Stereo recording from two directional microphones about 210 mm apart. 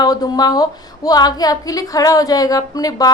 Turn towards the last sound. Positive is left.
turn(degrees=15)  # may be behind; listen again after turning